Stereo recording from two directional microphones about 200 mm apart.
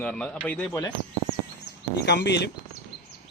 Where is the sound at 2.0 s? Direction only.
60° left (ahead or behind).